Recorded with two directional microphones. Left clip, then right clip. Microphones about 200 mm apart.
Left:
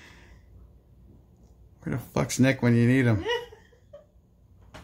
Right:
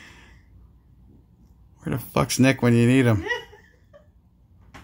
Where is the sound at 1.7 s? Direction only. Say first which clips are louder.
Right 5 dB; 25° right (ahead or behind).